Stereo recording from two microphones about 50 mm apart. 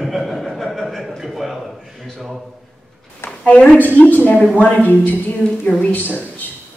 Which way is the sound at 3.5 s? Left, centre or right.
Left.